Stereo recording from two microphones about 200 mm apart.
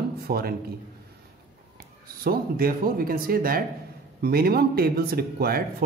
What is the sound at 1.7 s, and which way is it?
Speech, 50° right (ahead or behind).